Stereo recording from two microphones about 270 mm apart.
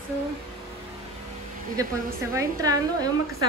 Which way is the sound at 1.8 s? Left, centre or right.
Centre.